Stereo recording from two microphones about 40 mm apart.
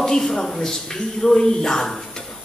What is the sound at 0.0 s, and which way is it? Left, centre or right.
Speech, centre.